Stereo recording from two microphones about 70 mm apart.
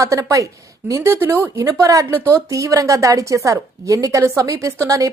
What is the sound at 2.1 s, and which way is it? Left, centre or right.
A woman's voice, right.